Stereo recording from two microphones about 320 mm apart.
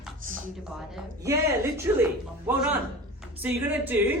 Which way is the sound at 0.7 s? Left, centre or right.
Centre.